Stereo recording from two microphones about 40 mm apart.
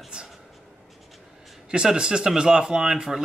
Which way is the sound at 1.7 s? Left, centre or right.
Right.